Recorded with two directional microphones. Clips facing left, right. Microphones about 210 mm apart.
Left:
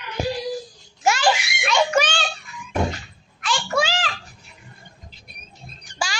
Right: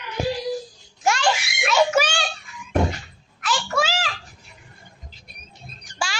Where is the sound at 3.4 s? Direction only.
5° right (ahead or behind).